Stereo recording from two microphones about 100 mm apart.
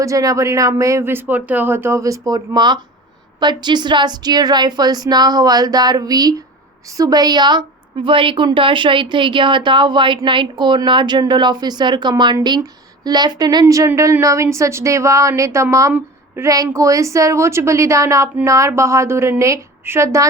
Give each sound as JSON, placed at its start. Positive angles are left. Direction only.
{"t": 0.0, "sound": "a woman's voice", "side_deg": -35}
{"t": 8.0, "sound": "a woman's voice", "side_deg": -60}
{"t": 15.9, "sound": "a sound", "side_deg": -20}
{"t": 16.5, "sound": "a woman's voice", "side_deg": -35}